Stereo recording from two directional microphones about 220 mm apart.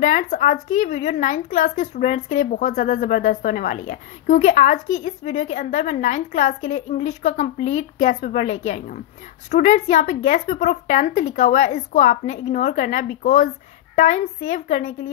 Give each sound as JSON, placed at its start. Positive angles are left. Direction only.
{"t": 0.0, "sound": "a woman's voice", "side_deg": 35}